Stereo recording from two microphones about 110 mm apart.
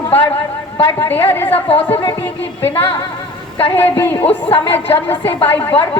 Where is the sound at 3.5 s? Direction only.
55° left (ahead or behind).